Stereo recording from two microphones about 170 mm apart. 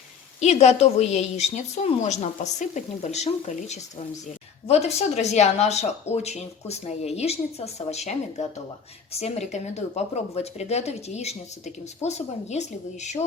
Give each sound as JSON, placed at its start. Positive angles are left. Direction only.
{"t": 0.3, "sound": "speech", "side_deg": 40}